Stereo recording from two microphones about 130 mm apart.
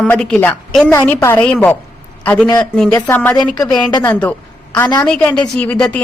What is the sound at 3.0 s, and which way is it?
A woman's voice, 15° left (ahead or behind).